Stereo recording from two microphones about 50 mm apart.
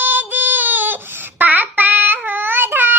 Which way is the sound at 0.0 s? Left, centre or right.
Right.